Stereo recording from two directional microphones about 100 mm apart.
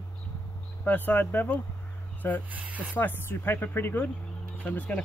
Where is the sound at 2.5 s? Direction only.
15° right (ahead or behind).